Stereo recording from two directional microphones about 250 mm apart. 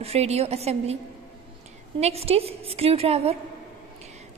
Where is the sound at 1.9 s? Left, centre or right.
Right.